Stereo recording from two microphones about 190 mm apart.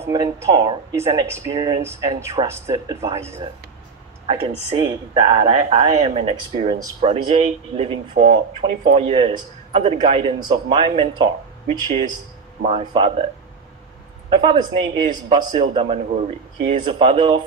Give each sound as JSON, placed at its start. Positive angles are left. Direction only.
{"t": 0.0, "sound": "speech", "side_deg": -15}
{"t": 5.1, "sound": "a man's voice", "side_deg": -25}
{"t": 6.8, "sound": "a man's voice", "side_deg": -20}
{"t": 7.1, "sound": "a man's voice", "side_deg": -30}
{"t": 14.3, "sound": "a man's voice", "side_deg": -25}